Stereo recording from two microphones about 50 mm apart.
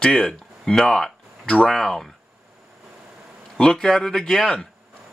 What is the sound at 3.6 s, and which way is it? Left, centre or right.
Speech, centre.